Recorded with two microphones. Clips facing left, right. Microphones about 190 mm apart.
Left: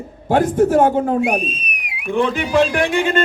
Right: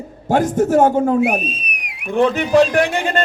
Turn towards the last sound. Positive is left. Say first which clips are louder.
# left 2 dB
turn(degrees=-40)  # may be behind; listen again after turning